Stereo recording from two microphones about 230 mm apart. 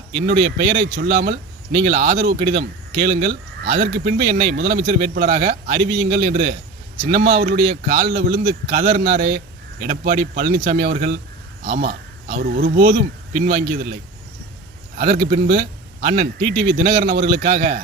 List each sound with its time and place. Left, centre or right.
0.6 s speech: right
14.9 s speech: right